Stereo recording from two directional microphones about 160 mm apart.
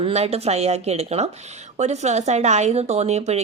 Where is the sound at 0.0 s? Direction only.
40° right (ahead or behind).